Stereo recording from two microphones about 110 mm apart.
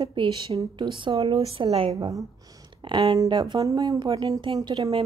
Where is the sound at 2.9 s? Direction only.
45° right (ahead or behind).